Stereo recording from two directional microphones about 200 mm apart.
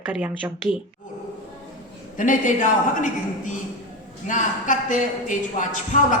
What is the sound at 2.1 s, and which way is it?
Speech, 40° left (ahead or behind).